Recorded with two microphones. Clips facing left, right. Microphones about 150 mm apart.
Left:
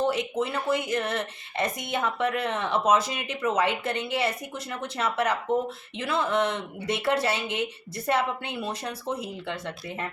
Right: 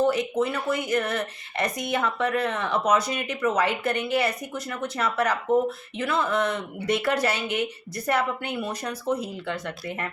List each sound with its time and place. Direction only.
0.0 s speech: 25° left (ahead or behind)